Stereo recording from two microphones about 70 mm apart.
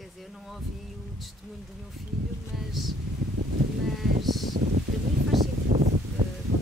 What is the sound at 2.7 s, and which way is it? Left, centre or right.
Speech, centre.